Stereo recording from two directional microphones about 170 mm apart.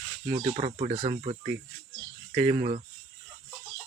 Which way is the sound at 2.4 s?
35° right (ahead or behind).